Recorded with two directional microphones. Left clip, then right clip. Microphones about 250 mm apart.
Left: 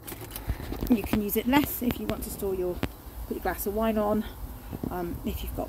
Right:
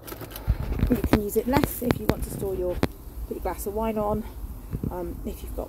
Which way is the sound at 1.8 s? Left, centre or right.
Centre.